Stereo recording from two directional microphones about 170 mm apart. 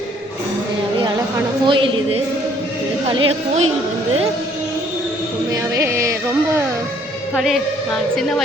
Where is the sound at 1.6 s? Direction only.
30° right (ahead or behind).